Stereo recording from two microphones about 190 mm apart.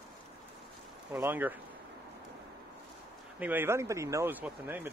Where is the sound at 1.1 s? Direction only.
10° right (ahead or behind).